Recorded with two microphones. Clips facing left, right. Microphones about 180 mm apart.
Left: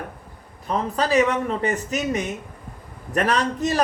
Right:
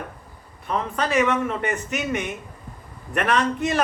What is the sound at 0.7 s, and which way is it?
A man's voice, 35° left (ahead or behind).